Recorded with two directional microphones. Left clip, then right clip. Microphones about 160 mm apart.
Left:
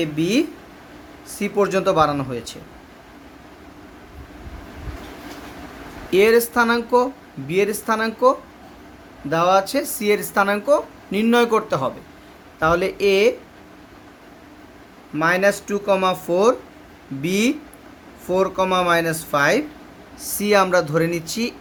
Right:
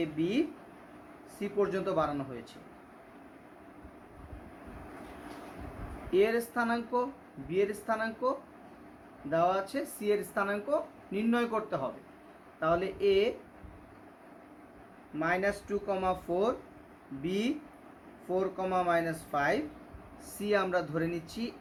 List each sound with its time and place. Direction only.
0.0 s speech: 80° left
6.1 s speech: 80° left
9.3 s speech: 70° left (ahead or behind)
15.2 s speech: 75° left (ahead or behind)